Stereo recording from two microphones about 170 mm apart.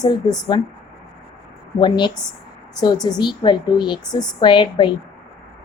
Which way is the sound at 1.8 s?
25° left (ahead or behind).